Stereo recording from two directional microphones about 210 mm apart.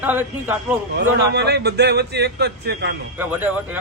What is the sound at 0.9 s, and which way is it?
A man's voice, 50° right (ahead or behind).